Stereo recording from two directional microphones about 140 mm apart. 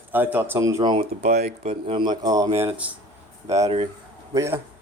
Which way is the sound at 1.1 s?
55° right (ahead or behind).